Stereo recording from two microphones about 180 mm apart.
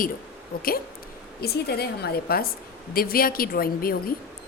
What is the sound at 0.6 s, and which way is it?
A woman's voice, 55° left (ahead or behind).